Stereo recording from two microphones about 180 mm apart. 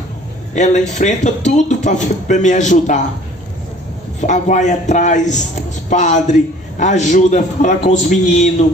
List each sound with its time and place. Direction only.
0.6 s speech: 45° left (ahead or behind)
4.2 s a man's voice: 45° left (ahead or behind)